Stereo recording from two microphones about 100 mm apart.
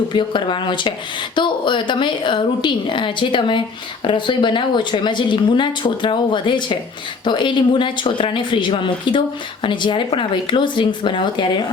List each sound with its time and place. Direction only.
0.1 s speech: 55° left (ahead or behind)